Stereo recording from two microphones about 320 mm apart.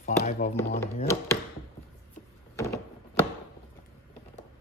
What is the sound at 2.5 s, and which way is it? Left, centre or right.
Door, centre.